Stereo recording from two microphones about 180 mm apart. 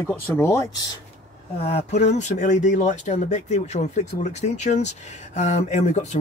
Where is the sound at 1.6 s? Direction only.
35° left (ahead or behind).